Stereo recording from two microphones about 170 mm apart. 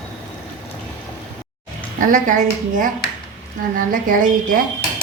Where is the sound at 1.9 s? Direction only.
50° right (ahead or behind).